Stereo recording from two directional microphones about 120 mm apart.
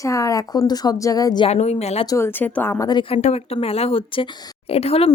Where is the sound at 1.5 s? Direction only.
65° left (ahead or behind).